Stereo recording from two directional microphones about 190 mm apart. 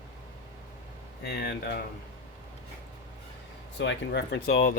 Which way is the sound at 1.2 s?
60° left (ahead or behind).